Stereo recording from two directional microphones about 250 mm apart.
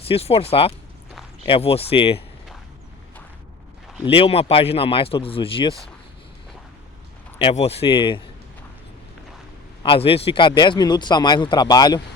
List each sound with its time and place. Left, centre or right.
0.1 s speech: left
4.0 s speech: left
7.3 s speech: left
9.8 s speech: left